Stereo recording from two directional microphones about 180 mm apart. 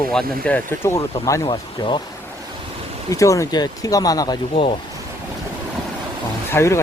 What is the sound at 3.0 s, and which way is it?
Speech, 15° left (ahead or behind).